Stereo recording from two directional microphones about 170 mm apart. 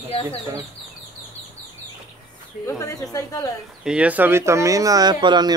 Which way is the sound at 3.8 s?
5° right (ahead or behind).